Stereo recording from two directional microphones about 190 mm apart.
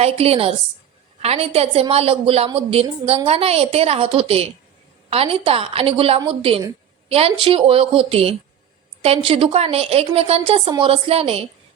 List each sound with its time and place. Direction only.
0.0 s a woman's voice: 30° right (ahead or behind)